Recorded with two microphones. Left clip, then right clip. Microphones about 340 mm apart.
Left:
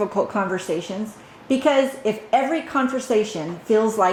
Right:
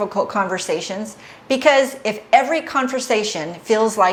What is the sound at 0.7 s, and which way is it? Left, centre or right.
A woman's voice, right.